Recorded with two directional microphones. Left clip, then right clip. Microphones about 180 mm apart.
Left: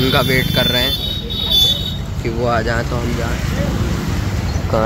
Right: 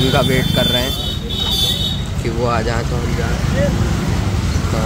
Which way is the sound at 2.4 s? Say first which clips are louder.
Left 1 dB; 15° left (ahead or behind).